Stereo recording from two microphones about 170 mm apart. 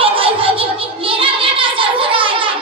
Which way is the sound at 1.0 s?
30° right (ahead or behind).